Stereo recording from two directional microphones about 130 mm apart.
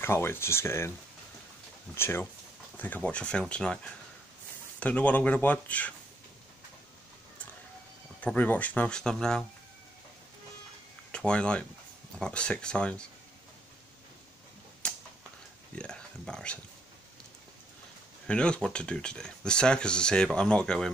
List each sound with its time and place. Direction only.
0.0 s speech: 15° left (ahead or behind)
2.0 s speech: 20° left (ahead or behind)
8.2 s speech: 10° left (ahead or behind)
11.1 s speech: 5° left (ahead or behind)
14.8 s a sound: 10° left (ahead or behind)
18.2 s speech: 5° left (ahead or behind)